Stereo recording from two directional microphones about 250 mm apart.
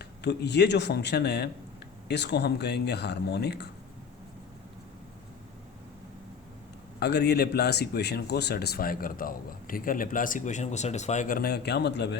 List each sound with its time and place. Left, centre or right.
0.0 s speech: left
7.0 s speech: left